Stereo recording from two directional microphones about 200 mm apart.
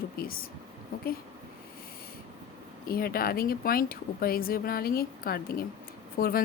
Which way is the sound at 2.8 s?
50° left (ahead or behind).